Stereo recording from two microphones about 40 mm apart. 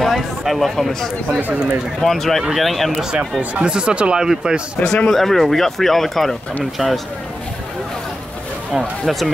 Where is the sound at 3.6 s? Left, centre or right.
Right.